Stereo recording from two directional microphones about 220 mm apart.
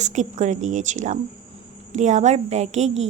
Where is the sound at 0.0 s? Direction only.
35° right (ahead or behind).